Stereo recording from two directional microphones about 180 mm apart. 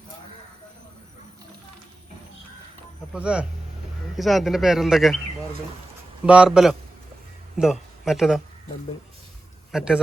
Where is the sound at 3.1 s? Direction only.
5° right (ahead or behind).